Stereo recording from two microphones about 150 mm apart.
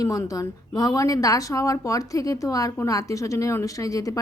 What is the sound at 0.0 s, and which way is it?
Speech, 25° left (ahead or behind).